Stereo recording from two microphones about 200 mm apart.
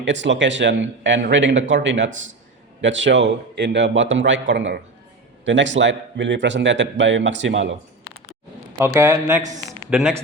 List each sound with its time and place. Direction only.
0.0 s a man's voice: 65° right (ahead or behind)
8.8 s a man's voice: 10° right (ahead or behind)